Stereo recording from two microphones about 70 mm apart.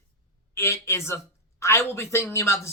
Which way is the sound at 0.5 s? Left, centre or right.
Left.